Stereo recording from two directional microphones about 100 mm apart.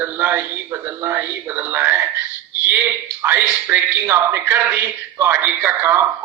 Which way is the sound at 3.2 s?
20° right (ahead or behind).